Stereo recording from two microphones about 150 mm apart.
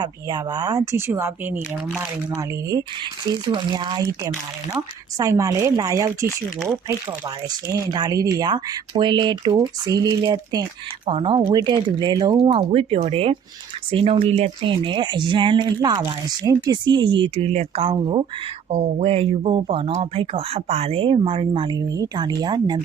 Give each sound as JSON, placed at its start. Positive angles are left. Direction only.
{"t": 0.0, "sound": "speech", "side_deg": -25}
{"t": 3.4, "sound": "speech", "side_deg": -30}
{"t": 7.8, "sound": "speech", "side_deg": -25}
{"t": 18.7, "sound": "speech", "side_deg": -50}